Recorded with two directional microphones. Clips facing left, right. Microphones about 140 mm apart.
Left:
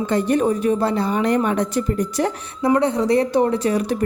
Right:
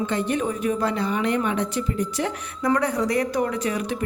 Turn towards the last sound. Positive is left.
turn(degrees=35)  # may be behind; listen again after turning